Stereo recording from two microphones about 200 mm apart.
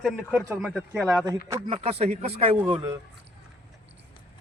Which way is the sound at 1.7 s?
30° right (ahead or behind).